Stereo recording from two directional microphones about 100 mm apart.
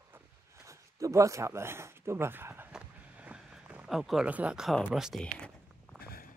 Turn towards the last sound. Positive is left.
turn(degrees=-5)  # may be behind; listen again after turning